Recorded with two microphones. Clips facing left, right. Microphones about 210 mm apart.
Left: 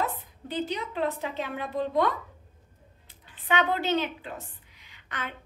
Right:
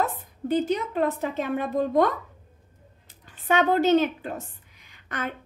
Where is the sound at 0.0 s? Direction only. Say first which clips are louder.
Right 4 dB; 45° right (ahead or behind).